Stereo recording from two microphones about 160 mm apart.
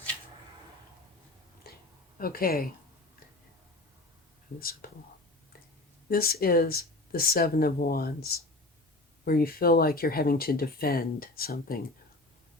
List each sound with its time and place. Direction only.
1.7 s a sound: 75° left (ahead or behind)
2.1 s speech: 65° left (ahead or behind)
4.6 s speech: 65° left (ahead or behind)
6.1 s speech: 70° left (ahead or behind)
9.2 s speech: 70° left (ahead or behind)